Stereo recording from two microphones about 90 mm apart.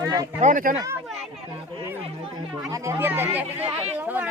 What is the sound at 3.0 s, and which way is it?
Speech, 20° right (ahead or behind).